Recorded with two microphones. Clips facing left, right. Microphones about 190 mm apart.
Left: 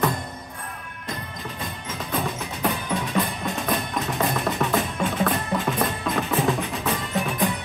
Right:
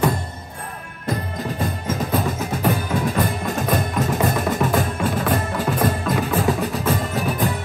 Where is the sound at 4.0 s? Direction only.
Centre (ahead or behind).